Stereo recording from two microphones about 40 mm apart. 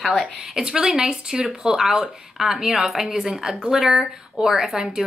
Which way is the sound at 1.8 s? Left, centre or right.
Centre.